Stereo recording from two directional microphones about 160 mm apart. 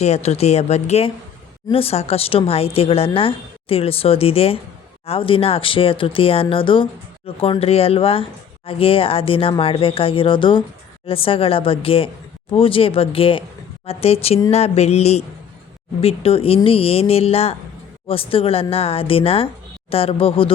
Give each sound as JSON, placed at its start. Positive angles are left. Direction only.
{"t": 0.0, "sound": "speech", "side_deg": 40}